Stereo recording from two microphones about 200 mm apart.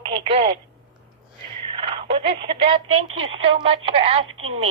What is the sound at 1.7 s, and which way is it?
A woman's voice, 25° right (ahead or behind).